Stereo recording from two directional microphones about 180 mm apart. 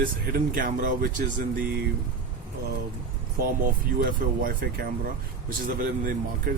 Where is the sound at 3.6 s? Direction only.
50° right (ahead or behind).